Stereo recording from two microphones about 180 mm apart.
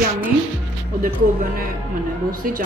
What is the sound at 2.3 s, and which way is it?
Speech, 50° right (ahead or behind).